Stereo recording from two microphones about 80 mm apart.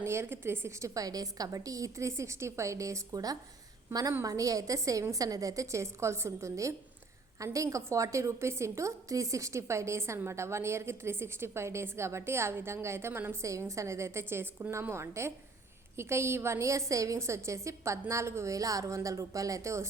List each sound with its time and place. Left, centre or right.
0.0 s a woman's voice: right
0.9 s a woman's voice: right